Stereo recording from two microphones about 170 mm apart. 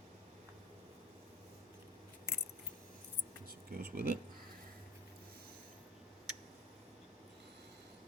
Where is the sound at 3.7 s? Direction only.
60° right (ahead or behind).